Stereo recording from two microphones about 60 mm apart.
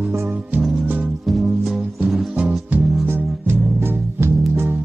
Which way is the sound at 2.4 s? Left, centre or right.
Right.